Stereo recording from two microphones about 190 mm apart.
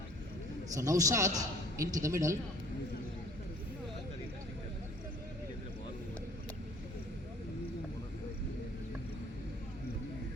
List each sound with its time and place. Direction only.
0.7 s a man's voice: 15° right (ahead or behind)